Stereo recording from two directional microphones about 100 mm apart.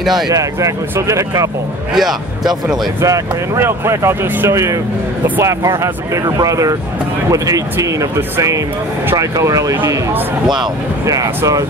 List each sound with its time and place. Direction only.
0.0 s speech: centre (ahead or behind)
0.3 s speech: 35° right (ahead or behind)
2.0 s speech: 5° right (ahead or behind)
3.0 s speech: 25° right (ahead or behind)
10.4 s speech: 5° right (ahead or behind)
11.1 s speech: 35° right (ahead or behind)